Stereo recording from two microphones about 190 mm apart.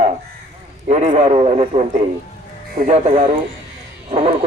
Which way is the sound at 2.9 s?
35° right (ahead or behind).